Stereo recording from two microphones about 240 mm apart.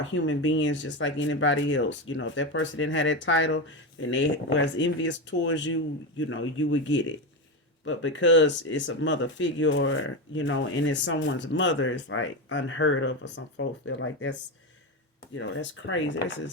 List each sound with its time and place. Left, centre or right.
0.0 s speech: left
15.4 s speech: left